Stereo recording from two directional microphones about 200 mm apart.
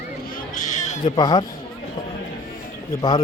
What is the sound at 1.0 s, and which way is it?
Speech, 20° left (ahead or behind).